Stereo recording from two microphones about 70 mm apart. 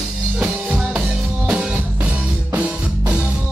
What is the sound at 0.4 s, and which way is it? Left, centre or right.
Music, centre.